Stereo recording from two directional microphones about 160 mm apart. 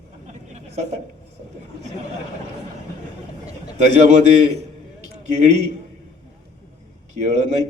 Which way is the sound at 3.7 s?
45° right (ahead or behind).